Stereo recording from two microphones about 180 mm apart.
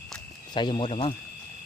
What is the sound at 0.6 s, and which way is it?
Speech, 25° left (ahead or behind).